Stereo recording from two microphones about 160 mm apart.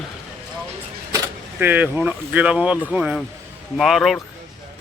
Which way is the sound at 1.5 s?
10° right (ahead or behind).